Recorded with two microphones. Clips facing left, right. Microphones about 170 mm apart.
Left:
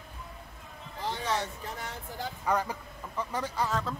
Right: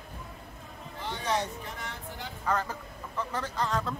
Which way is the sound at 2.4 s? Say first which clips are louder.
Left 1 dB; 10° left (ahead or behind).